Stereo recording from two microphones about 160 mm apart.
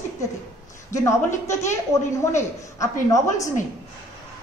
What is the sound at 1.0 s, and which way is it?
A woman's voice, 15° left (ahead or behind).